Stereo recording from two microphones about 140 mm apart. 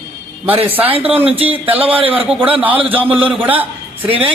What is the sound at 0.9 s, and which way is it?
Speech, 40° right (ahead or behind).